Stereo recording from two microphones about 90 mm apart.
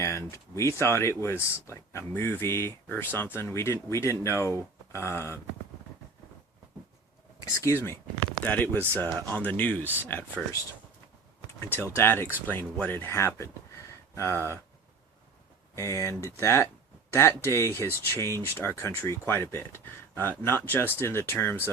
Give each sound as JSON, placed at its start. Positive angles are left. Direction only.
{"t": 0.0, "sound": "speech", "side_deg": 30}
{"t": 7.6, "sound": "speech", "side_deg": 30}
{"t": 11.6, "sound": "speech", "side_deg": 25}
{"t": 15.7, "sound": "speech", "side_deg": 35}